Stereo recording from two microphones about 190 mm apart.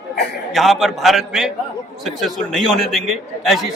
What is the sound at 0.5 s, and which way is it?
A man's voice, centre (ahead or behind).